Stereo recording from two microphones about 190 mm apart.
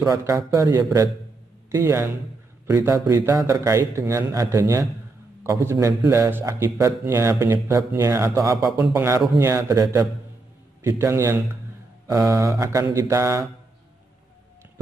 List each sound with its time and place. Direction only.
0.0 s a man's voice: 15° right (ahead or behind)